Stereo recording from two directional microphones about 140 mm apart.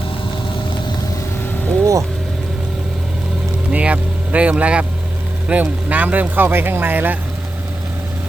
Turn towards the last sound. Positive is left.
turn(degrees=-15)  # may be behind; listen again after turning